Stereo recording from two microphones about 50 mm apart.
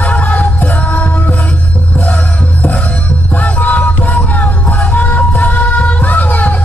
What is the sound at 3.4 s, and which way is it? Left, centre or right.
Music, left.